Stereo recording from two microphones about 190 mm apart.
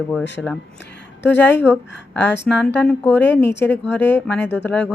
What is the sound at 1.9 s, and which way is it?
Speech, 65° left (ahead or behind).